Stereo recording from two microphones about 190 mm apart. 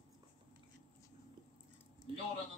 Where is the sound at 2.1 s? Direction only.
25° right (ahead or behind).